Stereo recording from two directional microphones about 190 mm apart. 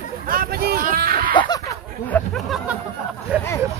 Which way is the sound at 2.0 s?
5° left (ahead or behind).